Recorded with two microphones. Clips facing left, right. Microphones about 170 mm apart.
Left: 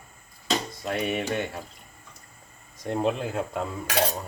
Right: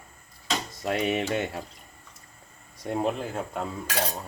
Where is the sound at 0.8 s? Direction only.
25° right (ahead or behind).